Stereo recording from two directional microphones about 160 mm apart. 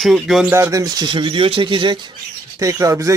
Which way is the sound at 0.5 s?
20° right (ahead or behind).